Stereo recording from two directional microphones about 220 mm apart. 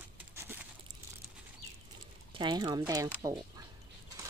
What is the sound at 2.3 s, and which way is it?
Speech, 20° right (ahead or behind).